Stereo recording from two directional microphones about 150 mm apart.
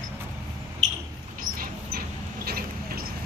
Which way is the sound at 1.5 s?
70° right (ahead or behind).